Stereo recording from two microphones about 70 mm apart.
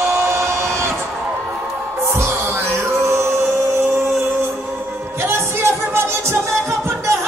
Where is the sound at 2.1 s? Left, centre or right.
Right.